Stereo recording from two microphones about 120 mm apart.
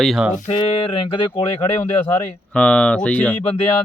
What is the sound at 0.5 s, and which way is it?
Speech, 45° left (ahead or behind).